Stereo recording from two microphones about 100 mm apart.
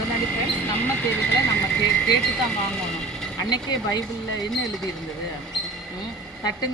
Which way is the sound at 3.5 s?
40° left (ahead or behind).